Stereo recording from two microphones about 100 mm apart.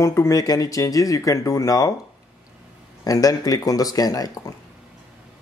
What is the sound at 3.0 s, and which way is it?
Speech, 35° left (ahead or behind).